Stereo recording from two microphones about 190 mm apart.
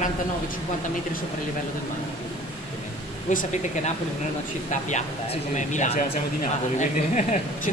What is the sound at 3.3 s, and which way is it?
Speech, 40° left (ahead or behind).